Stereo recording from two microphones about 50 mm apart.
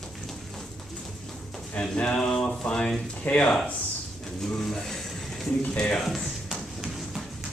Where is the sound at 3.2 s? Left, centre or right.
Left.